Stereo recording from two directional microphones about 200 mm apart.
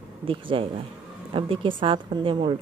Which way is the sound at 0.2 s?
25° right (ahead or behind).